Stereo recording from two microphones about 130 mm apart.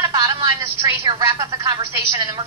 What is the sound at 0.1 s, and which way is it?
A woman's voice, 30° right (ahead or behind).